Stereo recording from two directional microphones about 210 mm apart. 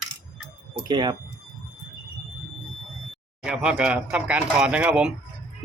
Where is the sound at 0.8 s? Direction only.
20° right (ahead or behind).